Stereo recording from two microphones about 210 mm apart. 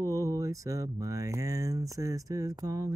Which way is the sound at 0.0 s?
15° right (ahead or behind).